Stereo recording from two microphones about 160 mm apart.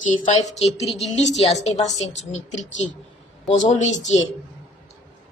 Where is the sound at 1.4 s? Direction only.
40° left (ahead or behind).